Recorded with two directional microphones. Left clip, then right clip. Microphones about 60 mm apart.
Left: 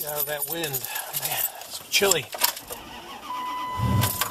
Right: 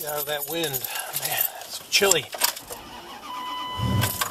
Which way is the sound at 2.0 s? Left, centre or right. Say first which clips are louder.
Right 1 dB; centre.